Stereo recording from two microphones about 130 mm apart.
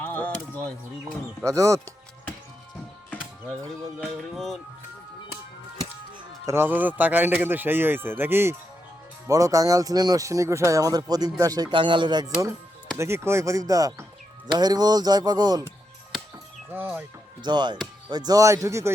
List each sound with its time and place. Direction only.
0.0 s music: 10° left (ahead or behind)
1.5 s speech: 25° right (ahead or behind)
4.4 s speech: centre (ahead or behind)
6.4 s speech: 20° right (ahead or behind)
13.0 s speech: 20° right (ahead or behind)
16.7 s speech: 15° right (ahead or behind)
17.4 s speech: 35° right (ahead or behind)